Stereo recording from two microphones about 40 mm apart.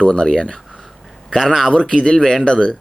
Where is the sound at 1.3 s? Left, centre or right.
Centre.